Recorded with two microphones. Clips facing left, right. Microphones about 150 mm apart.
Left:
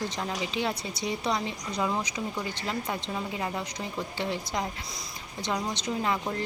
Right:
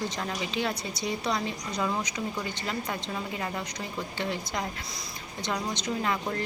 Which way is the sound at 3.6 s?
30° left (ahead or behind).